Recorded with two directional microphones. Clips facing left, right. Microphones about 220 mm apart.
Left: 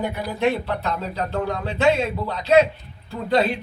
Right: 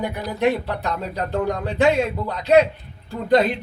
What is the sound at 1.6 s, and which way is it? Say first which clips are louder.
Speech: right 1 dB; 15° right (ahead or behind).